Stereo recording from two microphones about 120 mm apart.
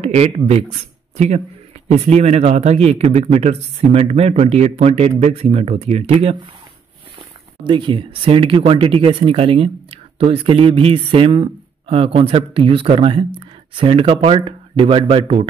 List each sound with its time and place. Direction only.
0.0 s a sound: 65° right (ahead or behind)
0.5 s speech: 60° right (ahead or behind)
7.6 s speech: 45° right (ahead or behind)